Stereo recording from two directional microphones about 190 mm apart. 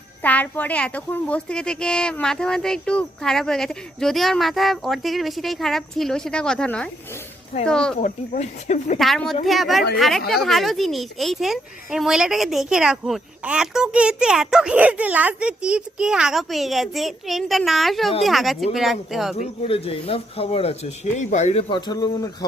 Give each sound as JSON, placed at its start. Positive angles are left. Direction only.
{"t": 0.2, "sound": "speech", "side_deg": 10}
{"t": 7.9, "sound": "speech", "side_deg": 40}
{"t": 9.0, "sound": "speech", "side_deg": 0}
{"t": 19.6, "sound": "speech", "side_deg": 30}
{"t": 21.7, "sound": "speech", "side_deg": 20}